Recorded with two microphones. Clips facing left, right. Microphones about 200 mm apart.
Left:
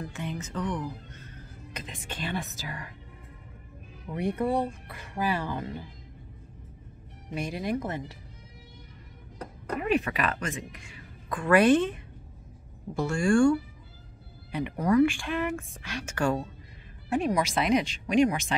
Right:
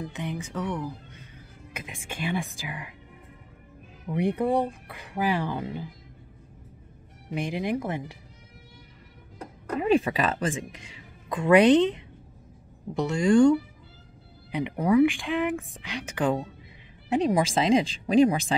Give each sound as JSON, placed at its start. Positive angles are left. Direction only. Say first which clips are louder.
{"t": 0.0, "sound": "speech", "louder": "right 2 dB", "side_deg": -15}
{"t": 4.1, "sound": "speech", "louder": "right 3 dB", "side_deg": -15}
{"t": 7.3, "sound": "speech", "louder": "right 2 dB", "side_deg": -15}
{"t": 9.8, "sound": "a woman's voice", "louder": "right 4 dB", "side_deg": -25}